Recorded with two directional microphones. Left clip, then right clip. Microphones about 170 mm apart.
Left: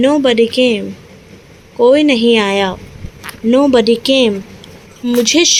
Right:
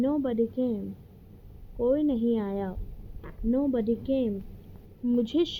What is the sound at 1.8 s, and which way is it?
Speech, 65° left (ahead or behind).